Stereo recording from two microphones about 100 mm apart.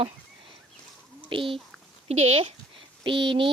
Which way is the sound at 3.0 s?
55° right (ahead or behind).